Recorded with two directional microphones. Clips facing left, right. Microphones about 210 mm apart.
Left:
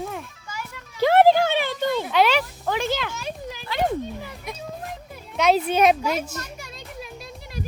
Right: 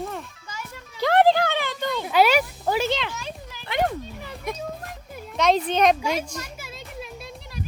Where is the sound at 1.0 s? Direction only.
15° left (ahead or behind).